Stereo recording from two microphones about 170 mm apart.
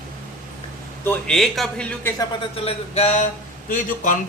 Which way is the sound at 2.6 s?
40° left (ahead or behind).